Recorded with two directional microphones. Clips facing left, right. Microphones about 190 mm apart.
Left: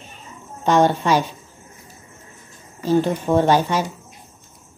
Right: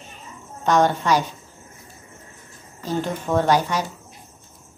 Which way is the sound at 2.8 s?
15° left (ahead or behind).